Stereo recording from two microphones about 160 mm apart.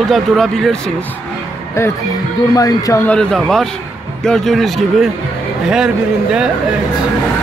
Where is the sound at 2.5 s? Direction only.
20° left (ahead or behind).